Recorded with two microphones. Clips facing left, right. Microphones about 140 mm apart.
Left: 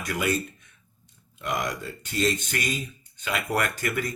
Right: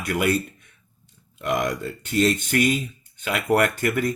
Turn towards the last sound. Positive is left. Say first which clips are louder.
# right 6 dB
turn(degrees=-50)  # may be behind; listen again after turning